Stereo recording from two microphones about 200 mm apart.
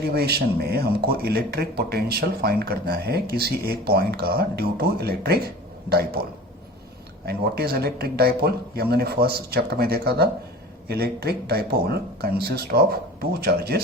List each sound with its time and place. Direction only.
0.1 s speech: 50° right (ahead or behind)
7.3 s speech: 50° right (ahead or behind)